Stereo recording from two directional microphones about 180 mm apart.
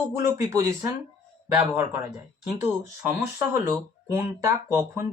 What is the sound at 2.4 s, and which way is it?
Speech, 10° right (ahead or behind).